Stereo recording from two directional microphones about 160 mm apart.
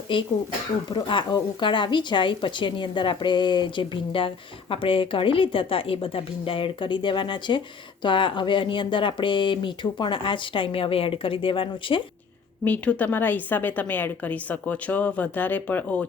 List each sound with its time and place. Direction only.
0.1 s speech: 30° left (ahead or behind)
12.6 s a woman's voice: 10° left (ahead or behind)